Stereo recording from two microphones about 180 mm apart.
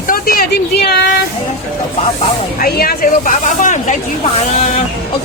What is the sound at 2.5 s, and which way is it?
Speech, 55° left (ahead or behind).